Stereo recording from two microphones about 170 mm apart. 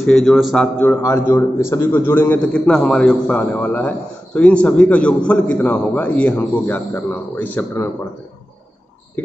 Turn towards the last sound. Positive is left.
turn(degrees=10)  # may be behind; listen again after turning